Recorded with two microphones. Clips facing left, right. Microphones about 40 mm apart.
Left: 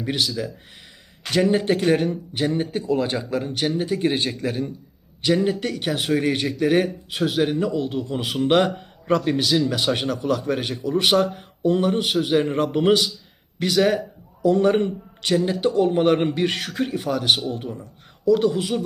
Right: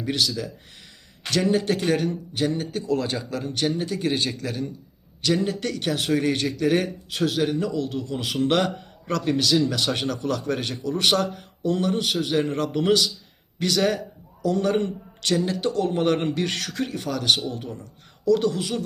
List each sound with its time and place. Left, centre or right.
0.0 s a man's voice: centre